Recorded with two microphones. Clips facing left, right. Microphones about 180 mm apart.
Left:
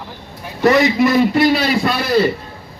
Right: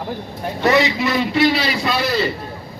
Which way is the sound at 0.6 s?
50° left (ahead or behind).